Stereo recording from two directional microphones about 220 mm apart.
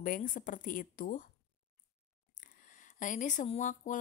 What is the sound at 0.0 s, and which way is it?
Speech, 40° left (ahead or behind).